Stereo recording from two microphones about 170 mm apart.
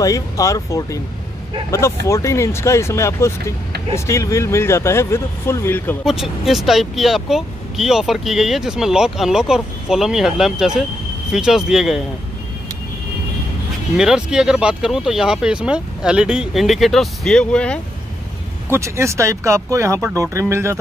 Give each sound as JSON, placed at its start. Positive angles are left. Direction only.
{"t": 0.0, "sound": "speech", "side_deg": 20}
{"t": 6.0, "sound": "speech", "side_deg": 0}
{"t": 13.9, "sound": "speech", "side_deg": -5}
{"t": 18.7, "sound": "speech", "side_deg": -15}